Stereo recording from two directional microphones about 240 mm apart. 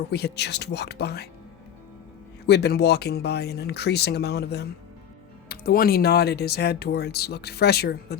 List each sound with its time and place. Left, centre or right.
0.0 s speech: left
2.5 s speech: left